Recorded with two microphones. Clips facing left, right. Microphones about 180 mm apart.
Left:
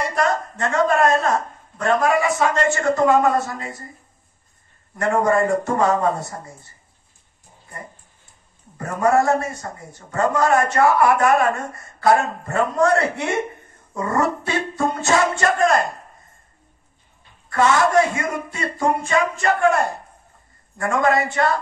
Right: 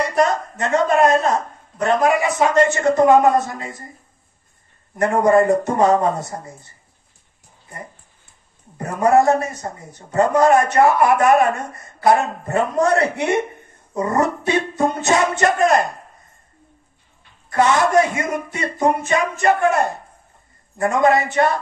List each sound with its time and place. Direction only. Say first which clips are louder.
0.1 s a sound: right 3 dB; 20° right (ahead or behind)
4.9 s a man's voice: right 4 dB; 20° right (ahead or behind)
8.7 s a man's voice: right 3 dB; 20° right (ahead or behind)
17.5 s a man's voice: right 1 dB; 20° right (ahead or behind)